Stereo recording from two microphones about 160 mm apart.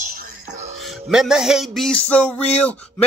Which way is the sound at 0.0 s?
65° right (ahead or behind).